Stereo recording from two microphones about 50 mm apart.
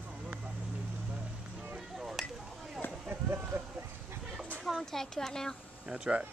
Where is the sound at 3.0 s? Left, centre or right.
Right.